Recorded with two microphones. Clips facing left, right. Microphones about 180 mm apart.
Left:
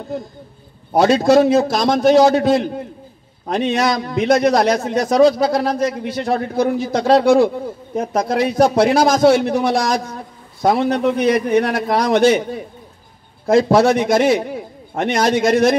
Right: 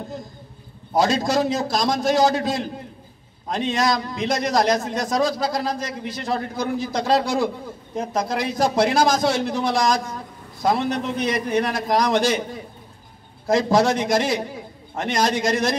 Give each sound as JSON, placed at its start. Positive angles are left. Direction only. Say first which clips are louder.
{"t": 0.9, "sound": "a man's voice", "louder": "left 8 dB", "side_deg": 60}
{"t": 13.5, "sound": "a man's voice", "louder": "left 5 dB", "side_deg": 60}